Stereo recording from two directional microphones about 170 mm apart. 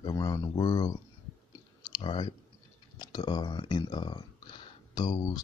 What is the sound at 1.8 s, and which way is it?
Clicking, 25° left (ahead or behind).